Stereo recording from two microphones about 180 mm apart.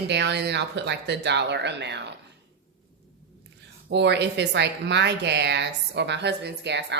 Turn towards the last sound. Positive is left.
turn(degrees=-70)  # may be behind; listen again after turning